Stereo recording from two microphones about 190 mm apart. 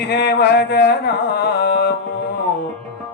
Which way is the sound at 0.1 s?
60° left (ahead or behind).